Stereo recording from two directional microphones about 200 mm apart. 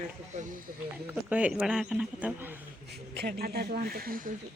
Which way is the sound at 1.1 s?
5° right (ahead or behind).